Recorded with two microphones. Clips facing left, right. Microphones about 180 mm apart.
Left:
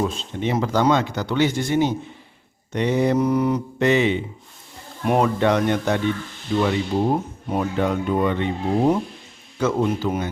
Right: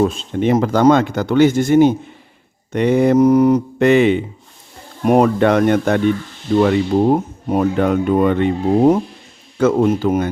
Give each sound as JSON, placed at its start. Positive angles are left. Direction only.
{"t": 0.0, "sound": "speech", "side_deg": -50}
{"t": 9.6, "sound": "speech", "side_deg": -50}